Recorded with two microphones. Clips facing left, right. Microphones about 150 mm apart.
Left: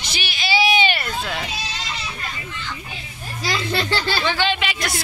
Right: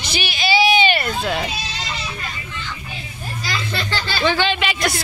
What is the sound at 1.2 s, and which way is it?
Speech, 30° right (ahead or behind).